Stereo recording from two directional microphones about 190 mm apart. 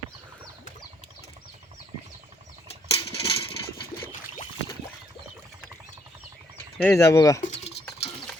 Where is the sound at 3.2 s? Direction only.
25° left (ahead or behind).